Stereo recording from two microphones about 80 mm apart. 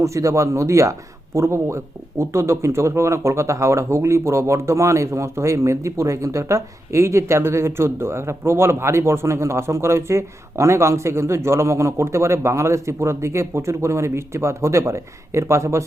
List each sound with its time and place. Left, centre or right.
0.0 s speech: right